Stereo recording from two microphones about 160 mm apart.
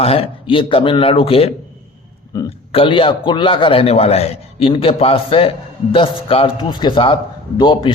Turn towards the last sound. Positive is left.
turn(degrees=30)  # may be behind; listen again after turning